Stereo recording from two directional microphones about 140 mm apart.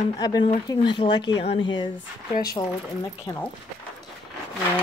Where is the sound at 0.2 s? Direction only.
30° left (ahead or behind).